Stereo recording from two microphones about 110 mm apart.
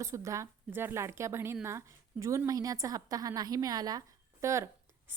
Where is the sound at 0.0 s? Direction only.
30° right (ahead or behind).